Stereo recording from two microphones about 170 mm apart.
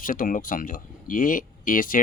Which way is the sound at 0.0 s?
55° left (ahead or behind).